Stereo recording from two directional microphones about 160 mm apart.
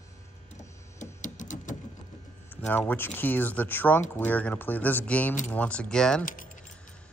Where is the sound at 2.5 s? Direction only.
10° left (ahead or behind).